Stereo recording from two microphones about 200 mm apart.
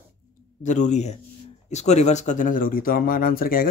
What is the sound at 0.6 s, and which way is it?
Speech, 35° left (ahead or behind).